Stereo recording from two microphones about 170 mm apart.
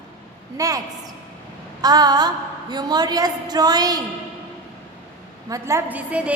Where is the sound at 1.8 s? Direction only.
25° right (ahead or behind).